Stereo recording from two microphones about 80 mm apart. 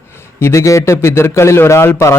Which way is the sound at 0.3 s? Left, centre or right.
Left.